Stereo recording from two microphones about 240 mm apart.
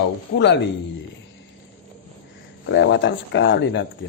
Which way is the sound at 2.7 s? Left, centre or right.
Left.